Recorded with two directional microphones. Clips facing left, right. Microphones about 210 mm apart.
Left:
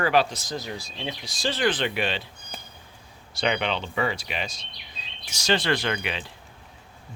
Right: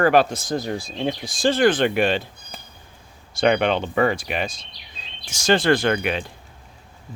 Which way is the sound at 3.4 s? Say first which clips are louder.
Right 7 dB; 50° right (ahead or behind).